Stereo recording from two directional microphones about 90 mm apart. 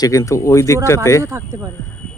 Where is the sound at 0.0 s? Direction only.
35° left (ahead or behind).